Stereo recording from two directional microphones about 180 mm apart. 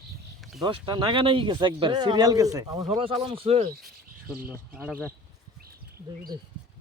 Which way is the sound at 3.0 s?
30° right (ahead or behind).